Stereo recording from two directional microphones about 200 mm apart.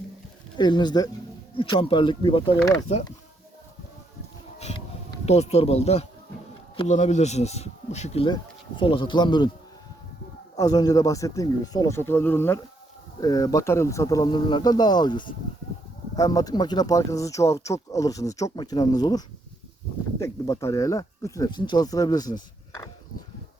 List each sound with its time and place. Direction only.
0.5 s speech: 20° left (ahead or behind)
5.2 s speech: 30° left (ahead or behind)
10.6 s speech: 20° left (ahead or behind)